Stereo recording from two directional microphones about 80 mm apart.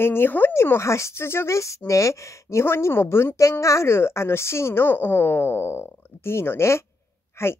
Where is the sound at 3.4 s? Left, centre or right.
Left.